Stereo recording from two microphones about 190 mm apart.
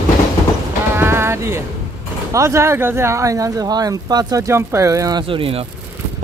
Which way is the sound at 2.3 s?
15° right (ahead or behind).